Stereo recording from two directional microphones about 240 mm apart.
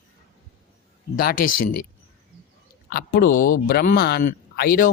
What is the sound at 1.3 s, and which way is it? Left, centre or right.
Speech, left.